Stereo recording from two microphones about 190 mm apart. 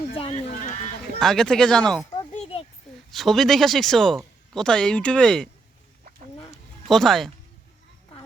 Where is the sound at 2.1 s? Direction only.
30° left (ahead or behind).